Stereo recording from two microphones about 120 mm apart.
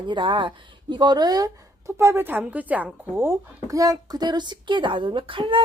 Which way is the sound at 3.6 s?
30° right (ahead or behind).